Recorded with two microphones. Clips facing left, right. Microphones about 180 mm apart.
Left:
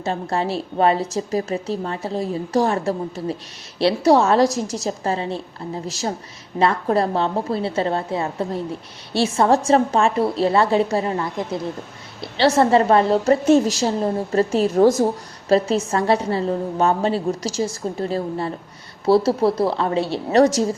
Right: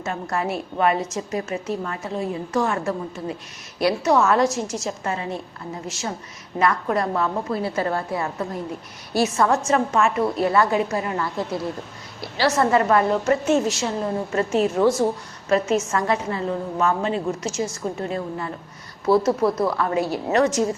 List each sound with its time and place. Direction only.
0.0 s a woman's voice: 30° left (ahead or behind)